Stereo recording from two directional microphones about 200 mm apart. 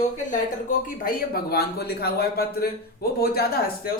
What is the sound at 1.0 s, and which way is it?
A man's voice, 50° left (ahead or behind).